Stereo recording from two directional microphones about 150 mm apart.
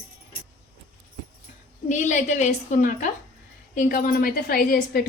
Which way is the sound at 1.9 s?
55° left (ahead or behind).